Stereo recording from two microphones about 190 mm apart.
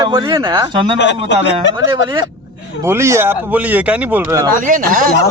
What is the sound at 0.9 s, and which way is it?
A man's voice, 70° left (ahead or behind).